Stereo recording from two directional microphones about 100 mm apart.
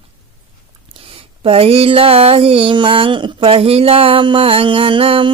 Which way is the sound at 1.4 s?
70° right (ahead or behind).